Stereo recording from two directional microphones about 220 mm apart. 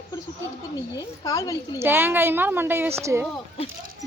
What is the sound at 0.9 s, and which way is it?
Speech, 15° left (ahead or behind).